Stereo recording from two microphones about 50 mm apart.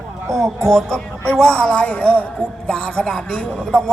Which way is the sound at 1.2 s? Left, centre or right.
Centre.